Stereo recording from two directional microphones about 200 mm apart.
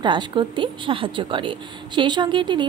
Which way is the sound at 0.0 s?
25° right (ahead or behind).